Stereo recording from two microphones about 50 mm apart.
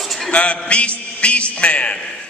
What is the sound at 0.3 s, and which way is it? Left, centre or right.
A man's voice, left.